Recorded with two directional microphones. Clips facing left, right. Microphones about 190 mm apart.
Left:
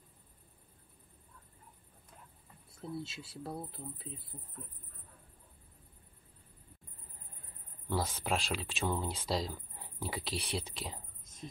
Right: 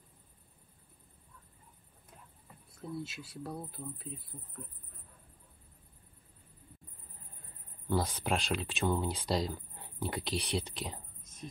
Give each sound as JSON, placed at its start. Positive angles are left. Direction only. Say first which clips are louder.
{"t": 3.0, "sound": "speech", "louder": "right 2 dB", "side_deg": 30}
{"t": 7.9, "sound": "speech", "louder": "right 2 dB", "side_deg": 0}